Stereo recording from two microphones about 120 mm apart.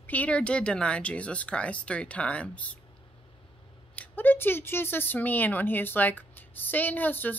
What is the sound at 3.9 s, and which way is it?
Speech, 15° left (ahead or behind).